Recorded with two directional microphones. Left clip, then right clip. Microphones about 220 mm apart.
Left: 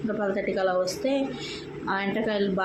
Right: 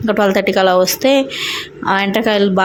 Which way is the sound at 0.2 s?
40° right (ahead or behind).